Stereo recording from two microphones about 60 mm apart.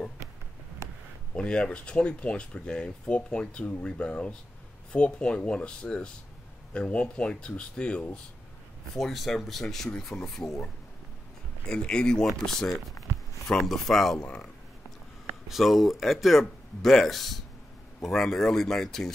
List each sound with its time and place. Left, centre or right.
1.3 s speech: centre
8.9 s speech: centre
14.2 s speech: centre
15.4 s speech: centre